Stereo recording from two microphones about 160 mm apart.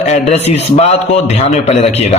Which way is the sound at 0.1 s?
40° left (ahead or behind).